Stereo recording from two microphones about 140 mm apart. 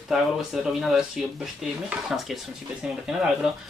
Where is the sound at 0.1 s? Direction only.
5° right (ahead or behind).